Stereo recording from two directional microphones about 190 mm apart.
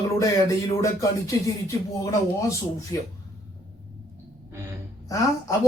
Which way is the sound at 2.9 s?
15° left (ahead or behind).